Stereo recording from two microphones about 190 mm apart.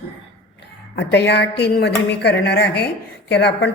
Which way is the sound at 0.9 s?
65° left (ahead or behind).